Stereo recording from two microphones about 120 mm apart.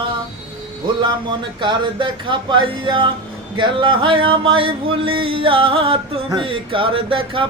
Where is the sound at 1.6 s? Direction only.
40° right (ahead or behind).